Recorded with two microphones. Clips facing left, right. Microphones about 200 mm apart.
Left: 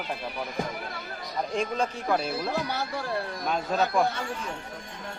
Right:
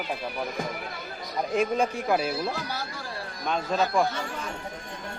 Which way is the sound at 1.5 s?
10° right (ahead or behind).